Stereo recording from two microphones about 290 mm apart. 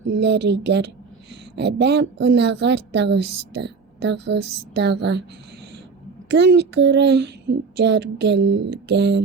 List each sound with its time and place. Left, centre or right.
0.2 s a woman's voice: right
6.2 s a woman's voice: right